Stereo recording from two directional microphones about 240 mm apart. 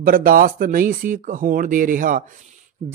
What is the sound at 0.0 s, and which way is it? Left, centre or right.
Speech, right.